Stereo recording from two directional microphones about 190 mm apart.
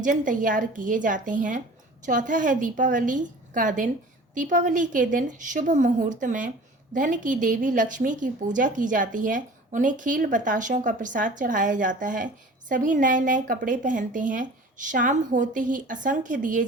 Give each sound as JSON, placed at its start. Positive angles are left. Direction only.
{"t": 0.0, "sound": "a woman's voice", "side_deg": -45}